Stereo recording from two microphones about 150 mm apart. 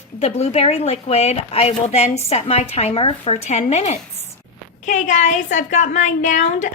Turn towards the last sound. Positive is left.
turn(degrees=55)  # may be behind; listen again after turning